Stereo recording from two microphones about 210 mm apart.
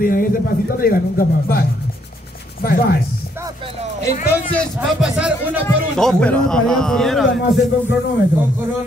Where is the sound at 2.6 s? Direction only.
45° left (ahead or behind).